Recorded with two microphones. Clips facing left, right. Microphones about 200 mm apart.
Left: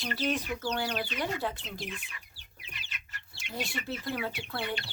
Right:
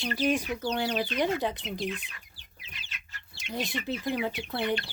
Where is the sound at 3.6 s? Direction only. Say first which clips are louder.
Right 4 dB; 15° right (ahead or behind).